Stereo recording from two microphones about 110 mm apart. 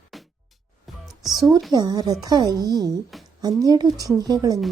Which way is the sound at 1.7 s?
40° right (ahead or behind).